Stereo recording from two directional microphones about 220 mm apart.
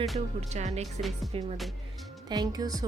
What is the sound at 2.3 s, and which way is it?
Speech, 20° right (ahead or behind).